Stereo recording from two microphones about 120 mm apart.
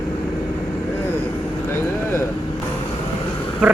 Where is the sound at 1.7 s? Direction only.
20° left (ahead or behind).